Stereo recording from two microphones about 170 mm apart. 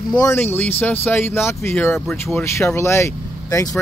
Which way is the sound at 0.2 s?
15° left (ahead or behind).